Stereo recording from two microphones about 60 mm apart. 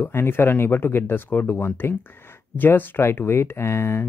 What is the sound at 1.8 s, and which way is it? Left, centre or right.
Speech, left.